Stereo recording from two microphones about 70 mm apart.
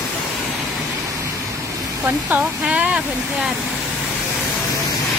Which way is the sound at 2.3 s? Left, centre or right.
Centre.